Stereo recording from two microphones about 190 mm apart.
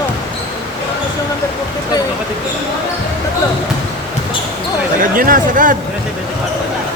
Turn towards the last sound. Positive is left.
turn(degrees=-45)  # may be behind; listen again after turning